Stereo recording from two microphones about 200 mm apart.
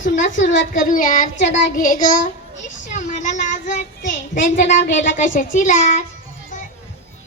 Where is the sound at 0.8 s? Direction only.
45° left (ahead or behind).